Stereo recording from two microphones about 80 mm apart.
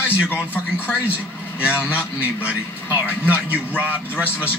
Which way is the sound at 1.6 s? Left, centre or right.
Centre.